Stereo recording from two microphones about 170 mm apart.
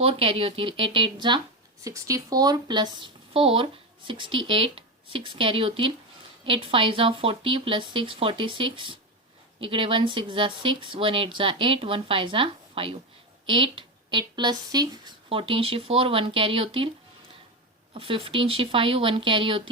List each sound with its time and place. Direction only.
0.0 s speech: 35° right (ahead or behind)
17.9 s speech: 30° right (ahead or behind)